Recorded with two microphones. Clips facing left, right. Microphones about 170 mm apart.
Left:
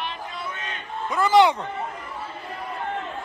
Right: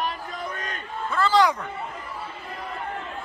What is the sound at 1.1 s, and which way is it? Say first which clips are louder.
Speech: left 3 dB; 20° left (ahead or behind).